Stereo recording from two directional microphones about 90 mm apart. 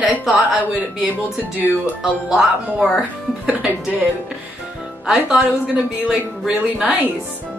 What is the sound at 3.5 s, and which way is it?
Speech, 15° right (ahead or behind).